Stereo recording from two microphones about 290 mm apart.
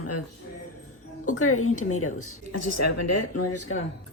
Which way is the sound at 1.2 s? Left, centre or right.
Left.